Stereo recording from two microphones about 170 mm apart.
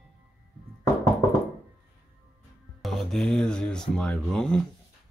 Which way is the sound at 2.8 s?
Centre (ahead or behind).